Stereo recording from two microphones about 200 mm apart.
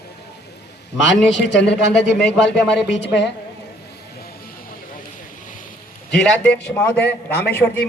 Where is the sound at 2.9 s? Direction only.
60° left (ahead or behind).